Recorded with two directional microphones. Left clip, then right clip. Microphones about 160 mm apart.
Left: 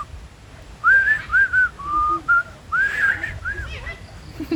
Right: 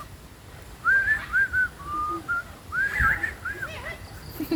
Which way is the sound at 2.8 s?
35° left (ahead or behind).